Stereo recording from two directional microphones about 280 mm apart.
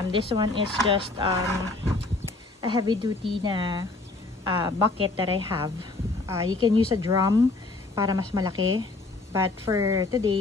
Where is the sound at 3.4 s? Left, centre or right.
Centre.